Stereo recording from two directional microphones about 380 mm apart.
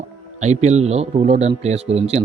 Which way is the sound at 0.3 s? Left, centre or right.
Centre.